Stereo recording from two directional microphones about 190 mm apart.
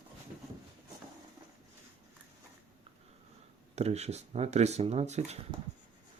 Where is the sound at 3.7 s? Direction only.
35° right (ahead or behind).